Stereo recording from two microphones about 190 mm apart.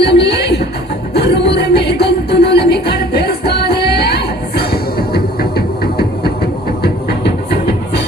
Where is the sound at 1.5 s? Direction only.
60° left (ahead or behind).